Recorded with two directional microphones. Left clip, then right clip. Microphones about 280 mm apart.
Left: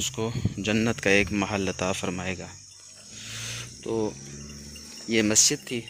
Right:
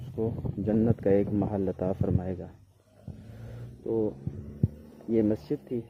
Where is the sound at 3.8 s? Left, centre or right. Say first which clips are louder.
Even; left.